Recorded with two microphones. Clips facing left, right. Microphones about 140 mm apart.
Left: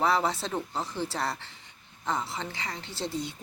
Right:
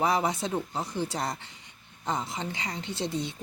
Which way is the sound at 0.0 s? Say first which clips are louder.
Even; 15° right (ahead or behind).